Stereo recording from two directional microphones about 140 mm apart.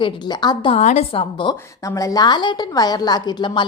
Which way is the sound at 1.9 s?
25° left (ahead or behind).